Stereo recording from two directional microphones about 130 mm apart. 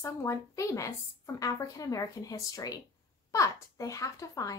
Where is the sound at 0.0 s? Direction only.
20° left (ahead or behind).